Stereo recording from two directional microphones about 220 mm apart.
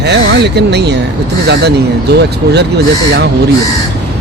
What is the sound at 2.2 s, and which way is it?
Speech, 50° right (ahead or behind).